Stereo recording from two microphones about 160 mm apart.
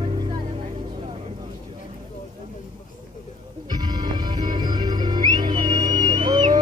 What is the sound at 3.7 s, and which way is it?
Music, 25° right (ahead or behind).